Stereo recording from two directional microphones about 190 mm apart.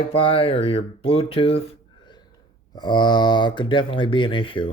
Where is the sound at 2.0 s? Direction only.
25° left (ahead or behind).